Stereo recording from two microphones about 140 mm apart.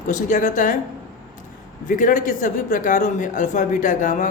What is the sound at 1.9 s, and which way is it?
A man's voice, 70° left (ahead or behind).